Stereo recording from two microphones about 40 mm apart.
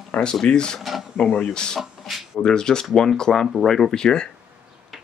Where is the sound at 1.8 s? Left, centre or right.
Centre.